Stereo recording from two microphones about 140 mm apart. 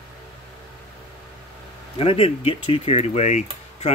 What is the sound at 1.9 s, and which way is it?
Speech, 40° left (ahead or behind).